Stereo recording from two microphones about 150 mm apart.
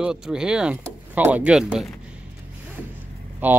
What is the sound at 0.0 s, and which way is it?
Speech, 5° right (ahead or behind).